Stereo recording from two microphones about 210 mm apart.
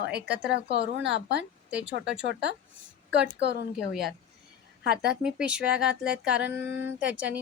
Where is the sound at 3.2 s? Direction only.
50° right (ahead or behind).